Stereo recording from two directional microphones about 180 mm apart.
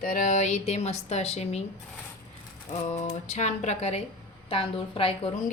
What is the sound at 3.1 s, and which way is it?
Speech, 40° left (ahead or behind).